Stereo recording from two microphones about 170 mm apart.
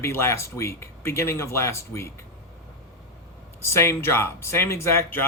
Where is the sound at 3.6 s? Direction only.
15° left (ahead or behind).